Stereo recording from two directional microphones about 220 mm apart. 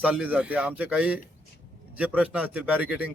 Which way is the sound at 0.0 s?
5° right (ahead or behind).